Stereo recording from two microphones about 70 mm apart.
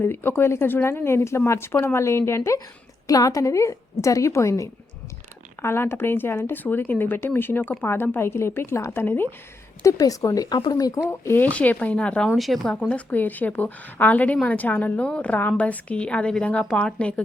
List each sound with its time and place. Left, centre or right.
0.0 s speech: left
3.1 s a woman's voice: left
5.6 s speech: left
9.8 s speech: left
11.1 s speech: left
11.3 s a woman's voice: left
12.4 s speech: centre
12.9 s a woman's voice: left